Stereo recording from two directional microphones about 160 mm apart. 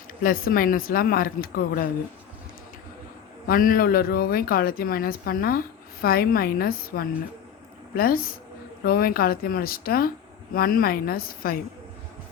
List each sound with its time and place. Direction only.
0.2 s speech: 60° left (ahead or behind)
3.4 s speech: 65° left (ahead or behind)